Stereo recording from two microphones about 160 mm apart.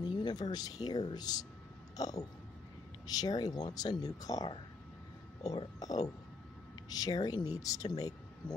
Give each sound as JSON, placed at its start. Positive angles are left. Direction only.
{"t": 0.0, "sound": "speech", "side_deg": 25}
{"t": 2.0, "sound": "a sound", "side_deg": 25}
{"t": 3.1, "sound": "speech", "side_deg": 25}
{"t": 5.6, "sound": "speech", "side_deg": 25}